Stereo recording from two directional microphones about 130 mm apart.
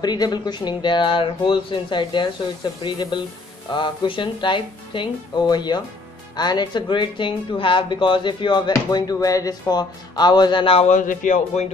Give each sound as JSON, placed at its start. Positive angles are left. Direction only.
{"t": 0.0, "sound": "speech", "side_deg": 30}
{"t": 10.9, "sound": "speech", "side_deg": 75}